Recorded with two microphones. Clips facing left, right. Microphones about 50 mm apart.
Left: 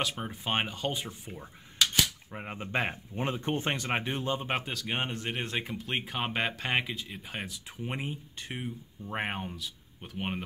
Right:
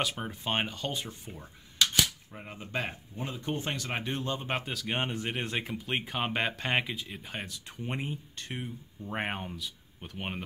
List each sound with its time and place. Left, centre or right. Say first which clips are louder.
0.0 s speech: even; centre
2.3 s speech: left 6 dB; left
4.1 s speech: left 1 dB; centre
4.6 s speech: even; centre